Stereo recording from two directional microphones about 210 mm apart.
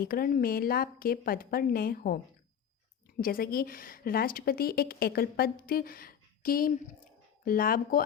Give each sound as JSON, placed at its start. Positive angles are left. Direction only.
{"t": 0.0, "sound": "a woman's voice", "side_deg": 45}